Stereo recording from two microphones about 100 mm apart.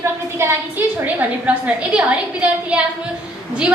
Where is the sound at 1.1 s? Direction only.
15° right (ahead or behind).